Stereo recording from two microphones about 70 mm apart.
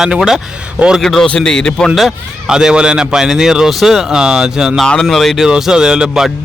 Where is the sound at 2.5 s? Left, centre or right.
Centre.